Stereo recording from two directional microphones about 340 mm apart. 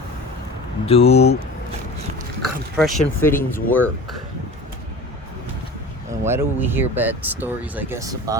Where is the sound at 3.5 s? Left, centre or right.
Centre.